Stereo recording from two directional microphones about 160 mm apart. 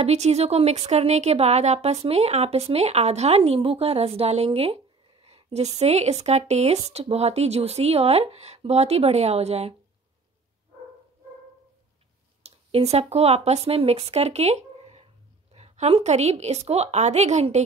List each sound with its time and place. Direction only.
0.0 s speech: 40° right (ahead or behind)
12.4 s a woman's voice: 40° right (ahead or behind)